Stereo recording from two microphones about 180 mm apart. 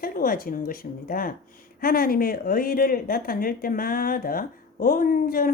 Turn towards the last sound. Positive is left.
turn(degrees=50)  # may be behind; listen again after turning